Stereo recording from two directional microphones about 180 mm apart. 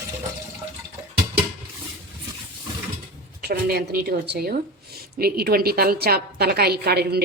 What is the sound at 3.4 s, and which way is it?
A woman's voice, 60° right (ahead or behind).